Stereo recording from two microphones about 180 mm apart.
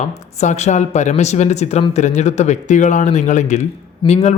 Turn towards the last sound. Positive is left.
turn(degrees=25)  # may be behind; listen again after turning